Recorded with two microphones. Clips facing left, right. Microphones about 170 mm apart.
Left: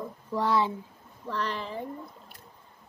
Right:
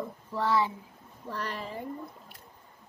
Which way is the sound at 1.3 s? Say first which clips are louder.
Left 4 dB; 50° right (ahead or behind).